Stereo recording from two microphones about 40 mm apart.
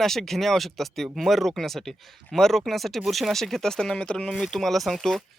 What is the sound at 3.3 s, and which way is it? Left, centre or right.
Speech, centre.